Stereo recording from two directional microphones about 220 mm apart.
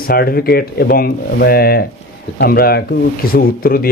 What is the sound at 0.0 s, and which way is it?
Speech, 45° left (ahead or behind).